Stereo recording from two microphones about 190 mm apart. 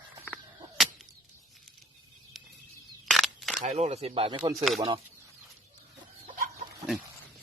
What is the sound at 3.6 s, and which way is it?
Speech, 35° right (ahead or behind).